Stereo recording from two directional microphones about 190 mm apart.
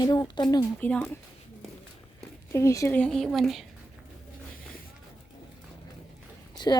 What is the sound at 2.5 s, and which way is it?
Speech, 15° left (ahead or behind).